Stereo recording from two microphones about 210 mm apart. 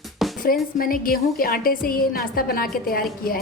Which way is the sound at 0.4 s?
45° left (ahead or behind).